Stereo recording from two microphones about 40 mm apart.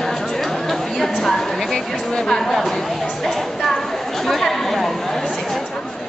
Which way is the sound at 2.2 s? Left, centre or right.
Centre.